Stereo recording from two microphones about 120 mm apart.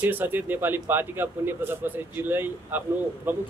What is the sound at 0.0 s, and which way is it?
Speech, 15° right (ahead or behind).